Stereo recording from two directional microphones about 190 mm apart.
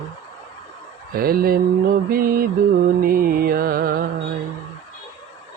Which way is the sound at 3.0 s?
50° right (ahead or behind).